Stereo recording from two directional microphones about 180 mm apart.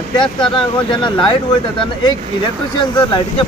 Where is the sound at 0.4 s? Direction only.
25° left (ahead or behind).